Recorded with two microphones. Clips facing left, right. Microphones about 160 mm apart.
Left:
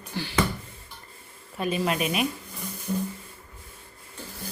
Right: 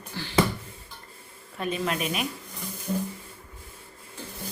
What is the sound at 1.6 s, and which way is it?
Speech, 5° left (ahead or behind).